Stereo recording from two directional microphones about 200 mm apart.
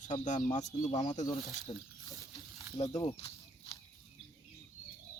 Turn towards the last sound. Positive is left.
turn(degrees=25)  # may be behind; listen again after turning